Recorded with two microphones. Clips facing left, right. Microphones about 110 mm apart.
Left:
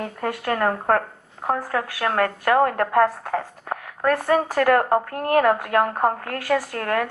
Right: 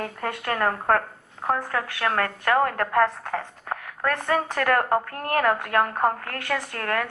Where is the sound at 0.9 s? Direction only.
40° left (ahead or behind).